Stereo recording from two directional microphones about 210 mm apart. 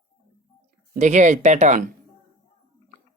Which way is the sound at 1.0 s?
35° right (ahead or behind).